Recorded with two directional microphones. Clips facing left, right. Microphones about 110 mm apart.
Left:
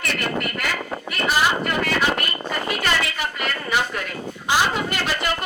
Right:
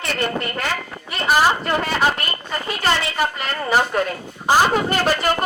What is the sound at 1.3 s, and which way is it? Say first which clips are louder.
A woman's voice: right 4 dB; 40° right (ahead or behind).